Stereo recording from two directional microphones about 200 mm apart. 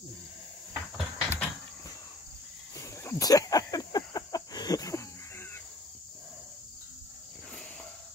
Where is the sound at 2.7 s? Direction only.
15° left (ahead or behind).